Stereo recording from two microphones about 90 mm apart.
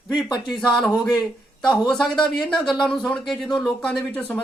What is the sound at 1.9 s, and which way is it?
Speech, 5° left (ahead or behind).